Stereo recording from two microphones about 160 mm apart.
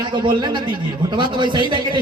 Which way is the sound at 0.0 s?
30° right (ahead or behind).